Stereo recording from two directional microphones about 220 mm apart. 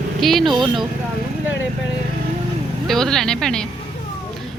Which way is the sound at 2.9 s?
Centre (ahead or behind).